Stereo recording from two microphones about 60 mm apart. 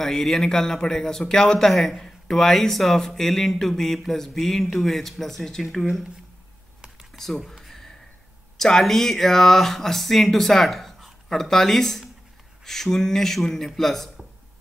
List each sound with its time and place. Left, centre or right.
0.0 s a man's voice: centre
7.2 s a sound: centre
8.5 s a man's voice: centre